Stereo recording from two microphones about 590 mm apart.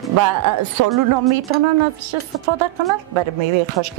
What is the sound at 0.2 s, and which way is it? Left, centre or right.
Speech, right.